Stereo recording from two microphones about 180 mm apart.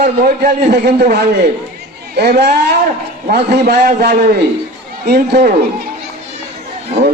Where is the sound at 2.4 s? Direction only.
65° right (ahead or behind).